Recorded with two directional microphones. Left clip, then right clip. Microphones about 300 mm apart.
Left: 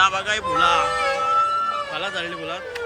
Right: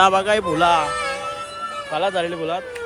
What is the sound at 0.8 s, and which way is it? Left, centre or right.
Music, left.